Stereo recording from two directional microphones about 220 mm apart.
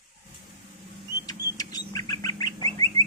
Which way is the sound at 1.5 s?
15° left (ahead or behind).